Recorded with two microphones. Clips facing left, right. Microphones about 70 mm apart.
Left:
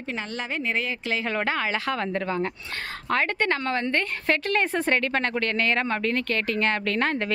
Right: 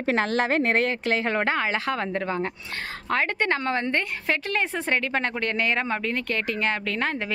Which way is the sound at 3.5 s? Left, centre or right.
Right.